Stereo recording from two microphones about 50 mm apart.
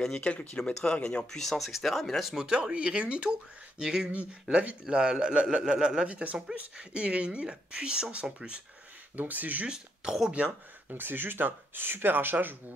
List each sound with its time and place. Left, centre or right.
0.2 s speech: left
1.3 s speech: centre
2.3 s a man's voice: centre
9.1 s speech: right
10.4 s speech: right
10.9 s speech: right